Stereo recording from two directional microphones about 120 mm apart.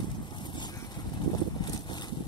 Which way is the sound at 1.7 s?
35° left (ahead or behind).